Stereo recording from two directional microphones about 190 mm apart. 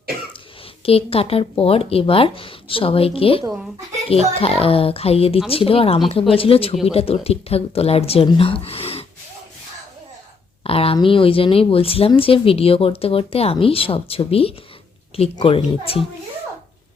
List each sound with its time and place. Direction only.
0.9 s speech: 30° left (ahead or behind)
10.6 s speech: 30° left (ahead or behind)